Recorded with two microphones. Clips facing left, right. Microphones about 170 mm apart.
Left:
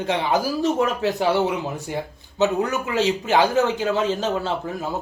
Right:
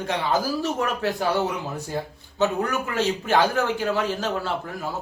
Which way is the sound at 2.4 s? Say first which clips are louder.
Left 2 dB; 20° left (ahead or behind).